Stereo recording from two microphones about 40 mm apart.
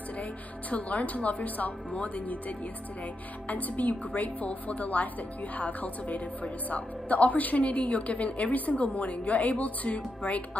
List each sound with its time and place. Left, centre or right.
0.2 s a woman's voice: left